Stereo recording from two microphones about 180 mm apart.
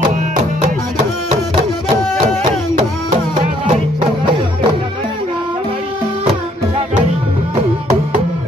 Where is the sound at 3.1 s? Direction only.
40° right (ahead or behind).